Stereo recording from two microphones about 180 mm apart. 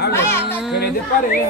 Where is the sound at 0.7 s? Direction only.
60° left (ahead or behind).